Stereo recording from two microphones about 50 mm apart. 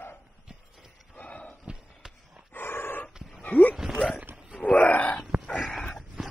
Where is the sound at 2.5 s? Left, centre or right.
Left.